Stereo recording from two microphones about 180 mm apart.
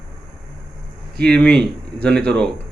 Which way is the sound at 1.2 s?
5° left (ahead or behind).